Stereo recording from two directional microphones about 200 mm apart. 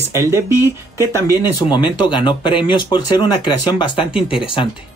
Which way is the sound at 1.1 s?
20° left (ahead or behind).